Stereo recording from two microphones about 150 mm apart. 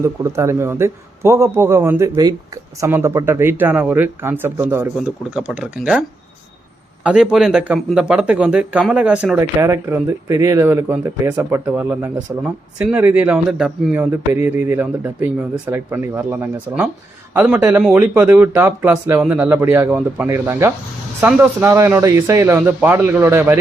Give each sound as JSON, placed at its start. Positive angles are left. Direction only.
{"t": 0.0, "sound": "speech", "side_deg": -20}
{"t": 9.4, "sound": "speech", "side_deg": -20}